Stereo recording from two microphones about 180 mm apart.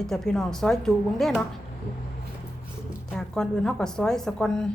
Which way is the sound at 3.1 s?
5° left (ahead or behind).